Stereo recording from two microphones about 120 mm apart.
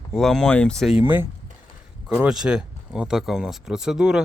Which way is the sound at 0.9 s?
15° right (ahead or behind).